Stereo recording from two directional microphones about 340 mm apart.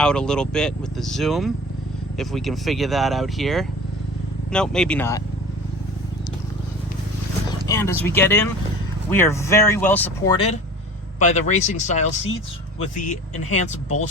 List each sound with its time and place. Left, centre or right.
0.0 s speech: centre
7.7 s speech: centre